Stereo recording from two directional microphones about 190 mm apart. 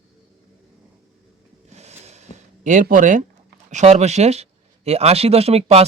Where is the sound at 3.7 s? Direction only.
35° right (ahead or behind).